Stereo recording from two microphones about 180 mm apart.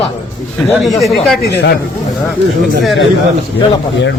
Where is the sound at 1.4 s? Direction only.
70° left (ahead or behind).